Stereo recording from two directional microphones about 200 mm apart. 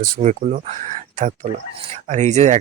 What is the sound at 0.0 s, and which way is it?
Speech, 40° right (ahead or behind).